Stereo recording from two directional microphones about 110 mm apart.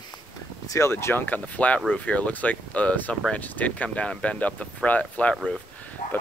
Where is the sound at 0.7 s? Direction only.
25° left (ahead or behind).